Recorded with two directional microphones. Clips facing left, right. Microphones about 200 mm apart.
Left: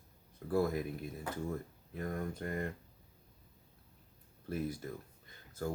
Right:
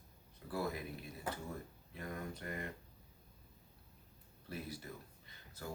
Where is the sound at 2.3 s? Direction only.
50° left (ahead or behind).